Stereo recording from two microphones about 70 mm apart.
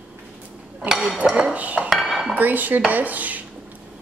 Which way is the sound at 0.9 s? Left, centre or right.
Centre.